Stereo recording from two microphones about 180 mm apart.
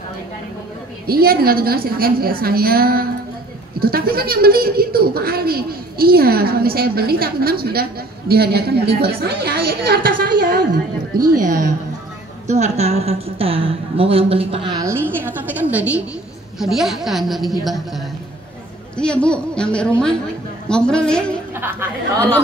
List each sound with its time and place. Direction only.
1.0 s a woman's voice: 55° right (ahead or behind); by 21.2 s 5° left (ahead or behind)
21.5 s a woman's voice: 10° right (ahead or behind)